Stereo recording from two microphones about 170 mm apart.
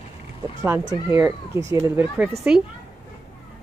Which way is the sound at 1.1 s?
15° right (ahead or behind).